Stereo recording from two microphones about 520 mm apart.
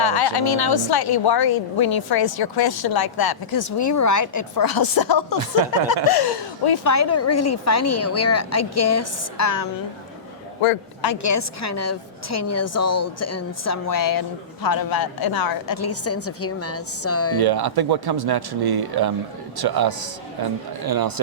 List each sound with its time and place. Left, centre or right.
0.0 s a woman's voice: left
6.9 s a woman's voice: left
11.0 s a woman's voice: left
17.4 s speech: right